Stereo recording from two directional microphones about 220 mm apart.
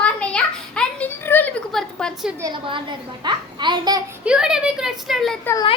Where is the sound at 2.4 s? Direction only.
20° right (ahead or behind).